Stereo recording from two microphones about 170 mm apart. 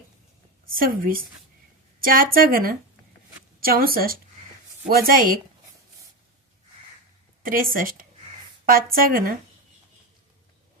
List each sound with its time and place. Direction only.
0.7 s speech: 55° right (ahead or behind)
7.4 s speech: 55° right (ahead or behind)